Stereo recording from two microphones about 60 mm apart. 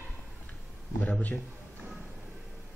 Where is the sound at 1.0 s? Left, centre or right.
Left.